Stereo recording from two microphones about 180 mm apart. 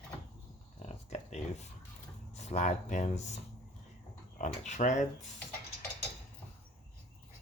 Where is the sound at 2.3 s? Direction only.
40° left (ahead or behind).